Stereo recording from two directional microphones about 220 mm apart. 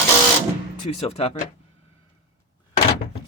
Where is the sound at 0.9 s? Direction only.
30° left (ahead or behind).